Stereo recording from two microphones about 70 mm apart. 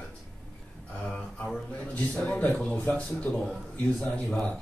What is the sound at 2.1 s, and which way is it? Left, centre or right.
A man's voice, centre.